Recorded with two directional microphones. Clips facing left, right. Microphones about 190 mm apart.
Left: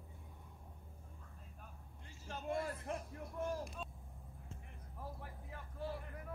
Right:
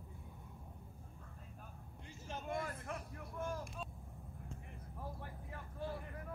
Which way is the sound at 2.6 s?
35° left (ahead or behind).